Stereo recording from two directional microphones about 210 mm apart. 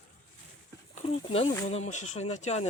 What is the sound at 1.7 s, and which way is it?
Speech, 30° left (ahead or behind).